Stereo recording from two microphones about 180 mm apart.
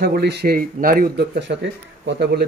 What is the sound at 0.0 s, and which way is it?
Speech, 65° right (ahead or behind).